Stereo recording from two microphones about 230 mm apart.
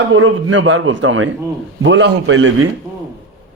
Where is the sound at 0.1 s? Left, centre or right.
Right.